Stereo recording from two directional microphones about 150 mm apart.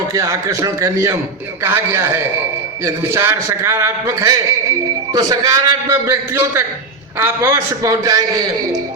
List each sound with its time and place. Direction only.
0.1 s a man's voice: 20° right (ahead or behind)